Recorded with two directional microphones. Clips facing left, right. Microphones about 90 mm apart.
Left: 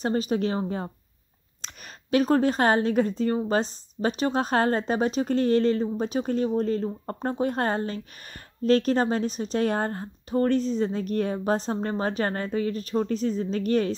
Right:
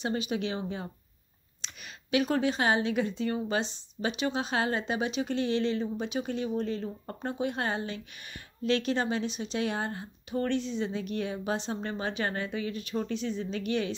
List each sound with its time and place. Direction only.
0.0 s a woman's voice: 40° left (ahead or behind)